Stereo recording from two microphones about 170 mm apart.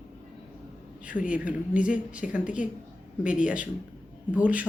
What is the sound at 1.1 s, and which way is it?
Speech, 50° left (ahead or behind).